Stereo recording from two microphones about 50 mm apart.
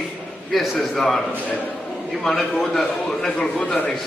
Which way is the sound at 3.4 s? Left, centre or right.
Left.